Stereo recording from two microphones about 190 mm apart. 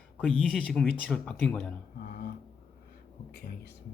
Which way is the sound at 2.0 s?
55° left (ahead or behind).